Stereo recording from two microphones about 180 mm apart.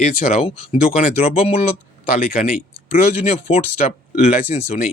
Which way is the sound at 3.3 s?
40° left (ahead or behind).